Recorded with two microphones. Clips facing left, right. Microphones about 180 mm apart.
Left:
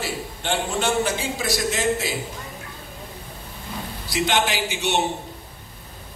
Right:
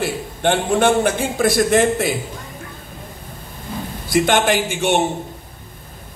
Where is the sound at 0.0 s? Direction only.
55° right (ahead or behind).